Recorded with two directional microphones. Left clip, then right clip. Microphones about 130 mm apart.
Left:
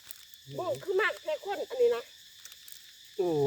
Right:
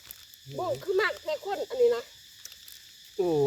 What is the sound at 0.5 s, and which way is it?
Speech, 35° right (ahead or behind).